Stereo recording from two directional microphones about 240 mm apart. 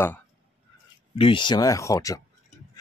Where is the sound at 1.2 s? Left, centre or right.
Left.